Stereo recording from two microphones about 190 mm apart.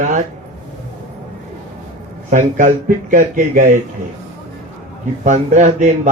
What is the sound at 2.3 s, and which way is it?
A man's voice, 40° right (ahead or behind).